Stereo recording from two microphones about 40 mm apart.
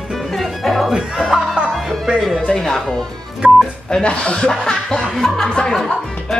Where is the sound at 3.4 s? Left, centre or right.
Right.